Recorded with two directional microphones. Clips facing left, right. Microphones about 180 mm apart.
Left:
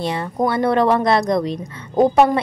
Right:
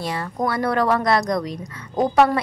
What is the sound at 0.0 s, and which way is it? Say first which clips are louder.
A woman's voice: left 4 dB; 25° left (ahead or behind).